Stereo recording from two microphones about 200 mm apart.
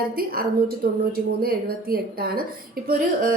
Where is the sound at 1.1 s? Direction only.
50° right (ahead or behind).